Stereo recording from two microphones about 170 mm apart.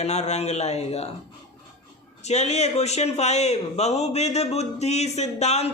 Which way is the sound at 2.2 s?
40° left (ahead or behind).